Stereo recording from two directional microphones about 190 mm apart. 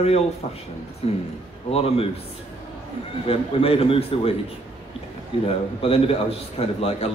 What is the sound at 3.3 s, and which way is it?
A man's voice, 30° left (ahead or behind).